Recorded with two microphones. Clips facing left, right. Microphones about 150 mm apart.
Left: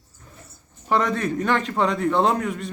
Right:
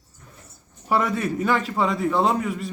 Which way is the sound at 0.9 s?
10° right (ahead or behind).